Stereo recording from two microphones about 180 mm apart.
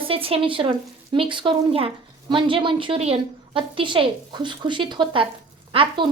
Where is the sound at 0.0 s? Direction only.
30° right (ahead or behind).